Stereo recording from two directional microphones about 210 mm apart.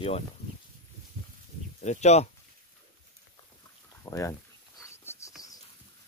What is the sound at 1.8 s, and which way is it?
Speech, 35° left (ahead or behind).